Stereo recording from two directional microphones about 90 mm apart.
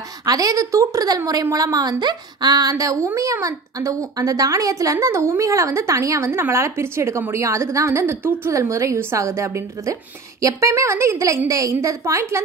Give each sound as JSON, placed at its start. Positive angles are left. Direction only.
{"t": 0.2, "sound": "a woman's voice", "side_deg": -45}